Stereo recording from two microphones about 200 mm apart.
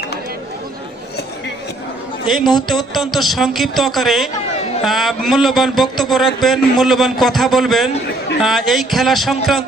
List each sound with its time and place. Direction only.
2.2 s a man's voice: centre (ahead or behind)
2.5 s music: 20° left (ahead or behind)
2.9 s a man's voice: centre (ahead or behind)